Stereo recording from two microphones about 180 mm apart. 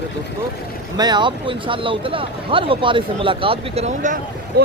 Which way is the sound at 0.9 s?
25° right (ahead or behind).